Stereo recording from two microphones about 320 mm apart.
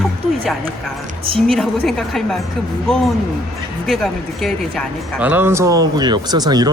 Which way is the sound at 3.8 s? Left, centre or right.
Centre.